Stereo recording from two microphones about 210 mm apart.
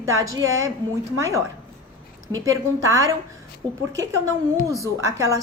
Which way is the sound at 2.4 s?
15° right (ahead or behind).